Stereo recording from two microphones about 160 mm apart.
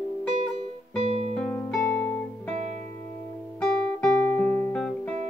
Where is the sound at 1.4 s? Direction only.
5° left (ahead or behind).